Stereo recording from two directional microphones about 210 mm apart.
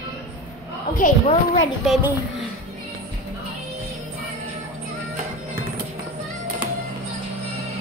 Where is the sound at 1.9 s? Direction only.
10° right (ahead or behind).